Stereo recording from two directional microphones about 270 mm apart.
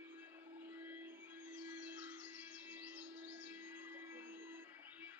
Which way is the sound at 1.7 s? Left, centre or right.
Centre.